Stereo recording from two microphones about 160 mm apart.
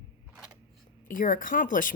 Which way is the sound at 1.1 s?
55° left (ahead or behind).